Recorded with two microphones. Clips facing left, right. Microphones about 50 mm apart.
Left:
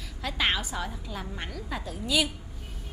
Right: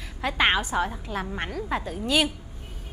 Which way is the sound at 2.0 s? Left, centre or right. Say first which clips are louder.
Right 3 dB; right.